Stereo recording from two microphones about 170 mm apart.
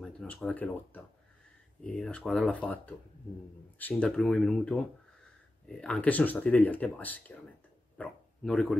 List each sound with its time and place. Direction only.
0.0 s speech: 5° left (ahead or behind)